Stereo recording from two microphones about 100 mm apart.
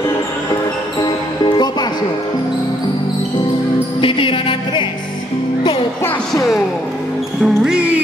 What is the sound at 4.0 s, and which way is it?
Music, 60° left (ahead or behind).